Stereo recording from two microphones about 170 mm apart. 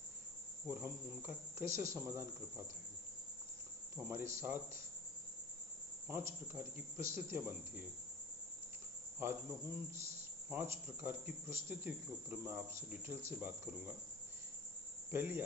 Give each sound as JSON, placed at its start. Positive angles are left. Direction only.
{"t": 0.7, "sound": "speech", "side_deg": -15}
{"t": 3.9, "sound": "speech", "side_deg": -15}
{"t": 6.1, "sound": "speech", "side_deg": -15}
{"t": 9.2, "sound": "speech", "side_deg": -15}
{"t": 15.1, "sound": "speech", "side_deg": -10}